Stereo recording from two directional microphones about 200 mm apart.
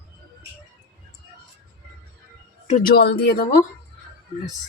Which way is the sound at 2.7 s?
45° left (ahead or behind).